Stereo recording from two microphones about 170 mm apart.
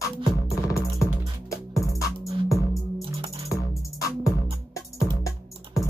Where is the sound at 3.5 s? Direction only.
20° left (ahead or behind).